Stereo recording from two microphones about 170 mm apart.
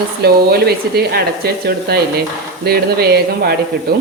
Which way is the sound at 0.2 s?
65° right (ahead or behind).